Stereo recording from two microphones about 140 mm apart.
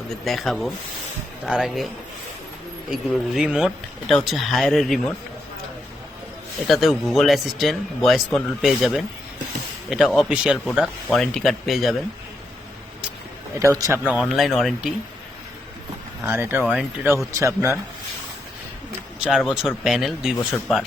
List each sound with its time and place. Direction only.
0.3 s speech: centre (ahead or behind)
2.9 s speech: 5° right (ahead or behind)
6.7 s speech: centre (ahead or behind)
13.6 s speech: 20° right (ahead or behind)
14.0 s speech: 10° right (ahead or behind)
16.2 s speech: 15° right (ahead or behind)
19.2 s speech: centre (ahead or behind)